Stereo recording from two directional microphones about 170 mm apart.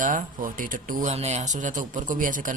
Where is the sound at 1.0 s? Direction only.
40° right (ahead or behind).